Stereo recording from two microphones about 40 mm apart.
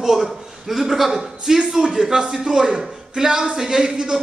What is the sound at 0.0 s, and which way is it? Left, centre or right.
A man's voice, centre.